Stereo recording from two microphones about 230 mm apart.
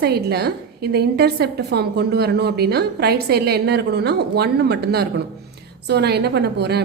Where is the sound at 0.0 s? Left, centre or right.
Right.